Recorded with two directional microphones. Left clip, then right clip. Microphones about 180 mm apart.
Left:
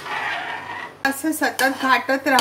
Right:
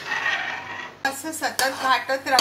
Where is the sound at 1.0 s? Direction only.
65° left (ahead or behind).